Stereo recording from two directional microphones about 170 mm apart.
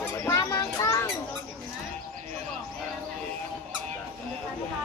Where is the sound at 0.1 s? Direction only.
15° left (ahead or behind).